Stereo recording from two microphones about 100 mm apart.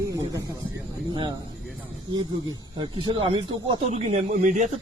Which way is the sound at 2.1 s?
50° right (ahead or behind).